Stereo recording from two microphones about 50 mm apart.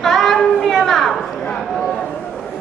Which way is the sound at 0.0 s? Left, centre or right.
Centre.